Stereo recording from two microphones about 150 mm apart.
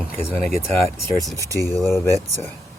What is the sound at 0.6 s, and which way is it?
Speech, 15° left (ahead or behind).